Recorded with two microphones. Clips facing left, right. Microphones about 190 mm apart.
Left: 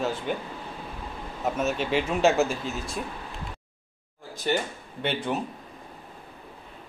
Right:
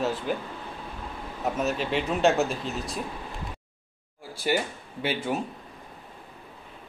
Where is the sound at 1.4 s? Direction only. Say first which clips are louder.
Left 1 dB; centre (ahead or behind).